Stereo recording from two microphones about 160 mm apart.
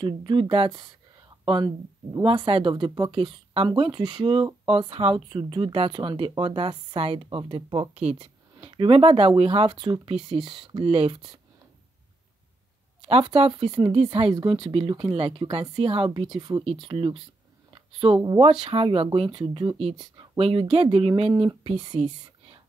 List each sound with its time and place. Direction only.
0.0 s speech: 30° right (ahead or behind)
13.0 s speech: 30° right (ahead or behind)